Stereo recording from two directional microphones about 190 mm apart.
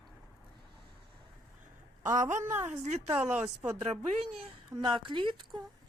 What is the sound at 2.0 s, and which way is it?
Speech, 40° right (ahead or behind).